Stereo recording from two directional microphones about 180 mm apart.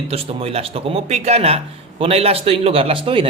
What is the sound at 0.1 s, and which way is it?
Speech, 30° right (ahead or behind).